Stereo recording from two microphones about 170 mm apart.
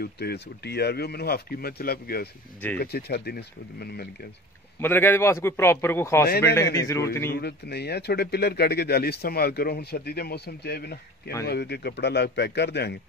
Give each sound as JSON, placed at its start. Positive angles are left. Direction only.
{"t": 0.0, "sound": "speech", "side_deg": 70}
{"t": 4.7, "sound": "a man's voice", "side_deg": 10}
{"t": 7.3, "sound": "a man's voice", "side_deg": 70}